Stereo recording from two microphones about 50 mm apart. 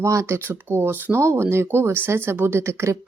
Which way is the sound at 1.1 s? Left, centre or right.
Right.